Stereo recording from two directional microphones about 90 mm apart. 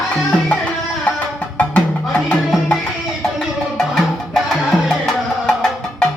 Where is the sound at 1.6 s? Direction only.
15° left (ahead or behind).